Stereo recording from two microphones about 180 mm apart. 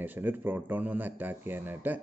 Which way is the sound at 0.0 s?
10° right (ahead or behind).